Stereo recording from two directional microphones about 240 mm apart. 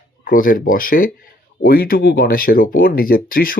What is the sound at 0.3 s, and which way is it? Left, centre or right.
Speech, left.